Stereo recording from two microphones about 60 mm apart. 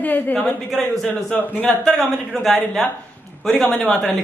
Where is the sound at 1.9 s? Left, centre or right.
Centre.